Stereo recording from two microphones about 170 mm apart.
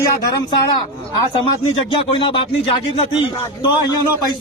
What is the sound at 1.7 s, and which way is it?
A man's voice, 30° left (ahead or behind).